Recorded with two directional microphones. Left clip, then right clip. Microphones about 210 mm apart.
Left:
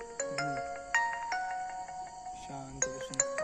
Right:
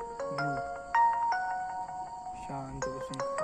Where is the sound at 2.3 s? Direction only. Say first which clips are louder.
Right 4 dB; 20° left (ahead or behind).